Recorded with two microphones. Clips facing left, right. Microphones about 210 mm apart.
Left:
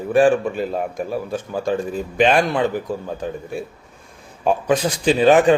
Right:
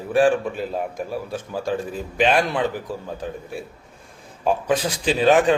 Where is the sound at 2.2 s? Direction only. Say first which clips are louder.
Left 3 dB; centre (ahead or behind).